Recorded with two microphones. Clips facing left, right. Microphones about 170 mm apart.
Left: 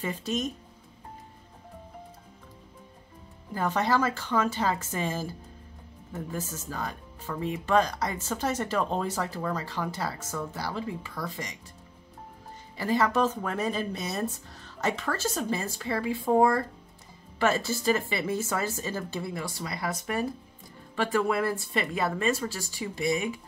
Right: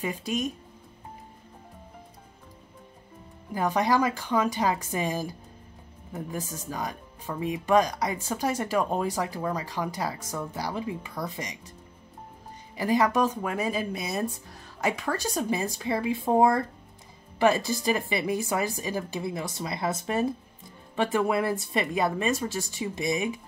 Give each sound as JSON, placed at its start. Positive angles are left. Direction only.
{"t": 0.0, "sound": "speech", "side_deg": -10}
{"t": 3.5, "sound": "speech", "side_deg": -15}
{"t": 12.7, "sound": "speech", "side_deg": -15}